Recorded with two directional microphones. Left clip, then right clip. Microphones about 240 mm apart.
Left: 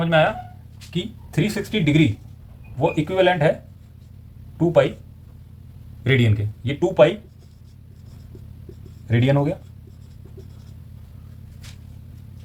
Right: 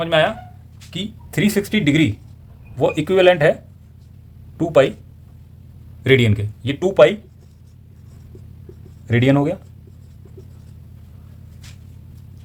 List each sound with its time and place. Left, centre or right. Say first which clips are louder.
0.0 s speech: right 1 dB; right
4.5 s speech: right 3 dB; right
6.0 s speech: right 6 dB; right
9.0 s speech: right 4 dB; right